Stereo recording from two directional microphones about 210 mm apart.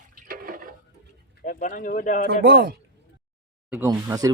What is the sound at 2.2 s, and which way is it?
Speech, 50° right (ahead or behind).